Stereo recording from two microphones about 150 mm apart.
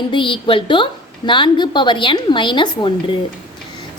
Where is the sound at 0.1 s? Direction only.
35° left (ahead or behind).